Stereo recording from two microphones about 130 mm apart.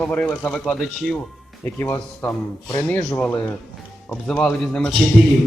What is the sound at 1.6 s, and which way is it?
Speech, 15° left (ahead or behind).